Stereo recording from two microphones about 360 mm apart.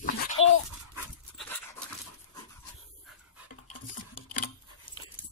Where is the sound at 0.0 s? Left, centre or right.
Left.